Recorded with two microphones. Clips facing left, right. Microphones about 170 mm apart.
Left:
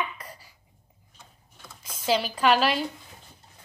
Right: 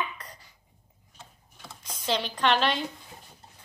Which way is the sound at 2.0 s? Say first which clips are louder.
Left 3 dB; 5° left (ahead or behind).